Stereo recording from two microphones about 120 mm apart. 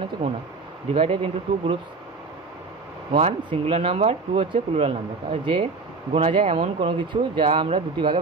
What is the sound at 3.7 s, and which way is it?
Speech, 55° right (ahead or behind).